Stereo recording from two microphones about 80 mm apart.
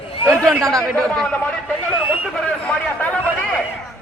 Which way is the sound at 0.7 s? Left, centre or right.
Centre.